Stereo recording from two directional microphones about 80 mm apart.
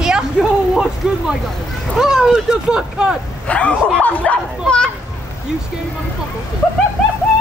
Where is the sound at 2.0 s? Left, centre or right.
Centre.